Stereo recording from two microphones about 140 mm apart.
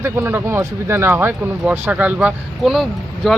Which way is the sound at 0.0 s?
15° right (ahead or behind).